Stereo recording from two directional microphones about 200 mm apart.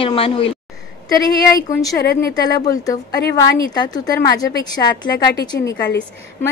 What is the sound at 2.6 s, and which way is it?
A woman's voice, 20° left (ahead or behind).